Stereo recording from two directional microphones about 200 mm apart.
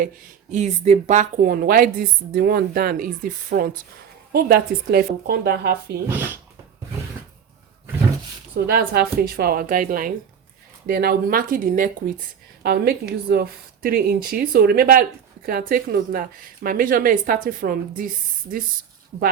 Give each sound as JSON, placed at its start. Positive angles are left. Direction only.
{"t": 0.5, "sound": "speech", "side_deg": -35}
{"t": 8.5, "sound": "speech", "side_deg": -50}